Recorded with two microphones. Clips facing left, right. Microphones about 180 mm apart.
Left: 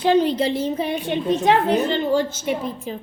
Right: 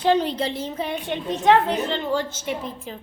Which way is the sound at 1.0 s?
10° left (ahead or behind).